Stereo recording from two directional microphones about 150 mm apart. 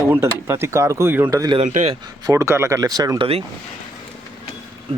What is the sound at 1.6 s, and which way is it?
Speech, 50° right (ahead or behind).